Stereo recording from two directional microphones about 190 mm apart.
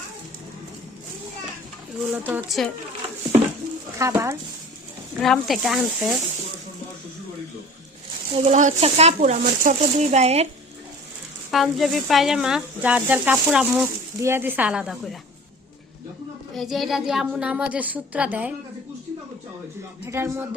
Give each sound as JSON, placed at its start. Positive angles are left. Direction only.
{"t": 2.1, "sound": "speech", "side_deg": -10}
{"t": 3.9, "sound": "speech", "side_deg": -15}
{"t": 5.2, "sound": "speech", "side_deg": 0}
{"t": 8.3, "sound": "speech", "side_deg": -30}
{"t": 11.5, "sound": "a woman's voice", "side_deg": 0}
{"t": 16.6, "sound": "a woman's voice", "side_deg": 0}
{"t": 20.1, "sound": "a woman's voice", "side_deg": -15}